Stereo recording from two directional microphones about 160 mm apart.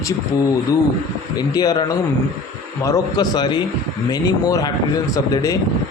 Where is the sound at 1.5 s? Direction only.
25° left (ahead or behind).